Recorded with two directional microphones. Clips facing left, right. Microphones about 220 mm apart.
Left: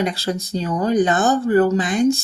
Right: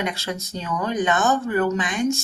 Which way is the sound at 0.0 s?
35° left (ahead or behind).